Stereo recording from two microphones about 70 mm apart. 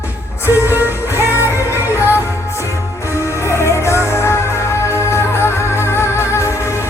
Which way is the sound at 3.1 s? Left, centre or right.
Left.